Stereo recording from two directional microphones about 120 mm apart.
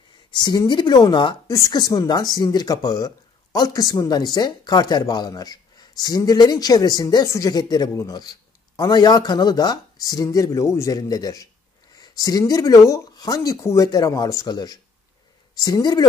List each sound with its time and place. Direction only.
0.3 s speech: 35° left (ahead or behind)
1.5 s speech: 30° left (ahead or behind)